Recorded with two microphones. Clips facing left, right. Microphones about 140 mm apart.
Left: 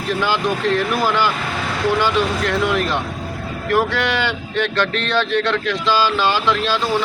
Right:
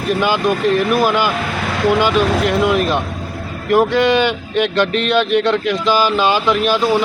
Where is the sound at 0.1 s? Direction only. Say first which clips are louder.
Right 4 dB; 15° right (ahead or behind).